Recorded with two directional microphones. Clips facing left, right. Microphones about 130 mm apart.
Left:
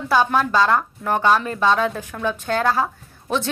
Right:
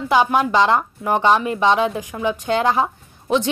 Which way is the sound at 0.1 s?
15° right (ahead or behind).